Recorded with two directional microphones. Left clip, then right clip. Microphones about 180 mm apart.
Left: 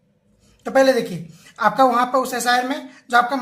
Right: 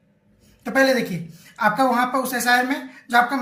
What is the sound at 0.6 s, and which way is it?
A woman's voice, 35° left (ahead or behind).